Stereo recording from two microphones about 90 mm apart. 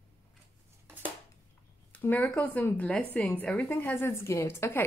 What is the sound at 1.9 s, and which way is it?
A woman's voice, 20° left (ahead or behind).